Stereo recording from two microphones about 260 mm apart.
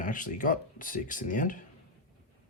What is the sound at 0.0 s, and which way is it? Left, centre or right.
Speech, left.